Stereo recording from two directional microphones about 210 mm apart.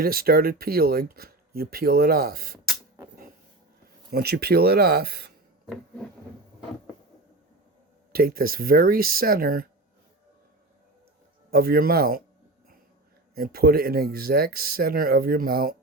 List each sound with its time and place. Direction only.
0.0 s speech: 45° right (ahead or behind)
4.1 s speech: 50° right (ahead or behind)
5.6 s a sound: centre (ahead or behind)
8.1 s speech: 45° right (ahead or behind)
11.5 s speech: 45° right (ahead or behind)
13.3 s speech: 45° right (ahead or behind)